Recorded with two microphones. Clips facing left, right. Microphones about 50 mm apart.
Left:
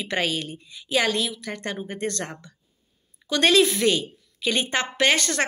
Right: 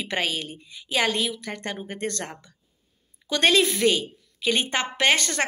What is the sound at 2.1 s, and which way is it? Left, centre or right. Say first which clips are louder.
Speech: left 2 dB; left.